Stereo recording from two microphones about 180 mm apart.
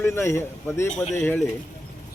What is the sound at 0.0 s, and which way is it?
A man's voice, 15° left (ahead or behind).